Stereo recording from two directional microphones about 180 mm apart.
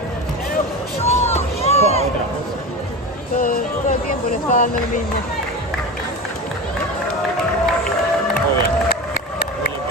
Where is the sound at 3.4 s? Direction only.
50° left (ahead or behind).